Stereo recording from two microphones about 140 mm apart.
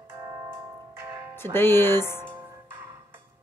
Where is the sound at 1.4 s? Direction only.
15° left (ahead or behind).